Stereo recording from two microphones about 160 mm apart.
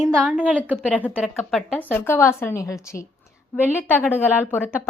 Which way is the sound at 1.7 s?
10° left (ahead or behind).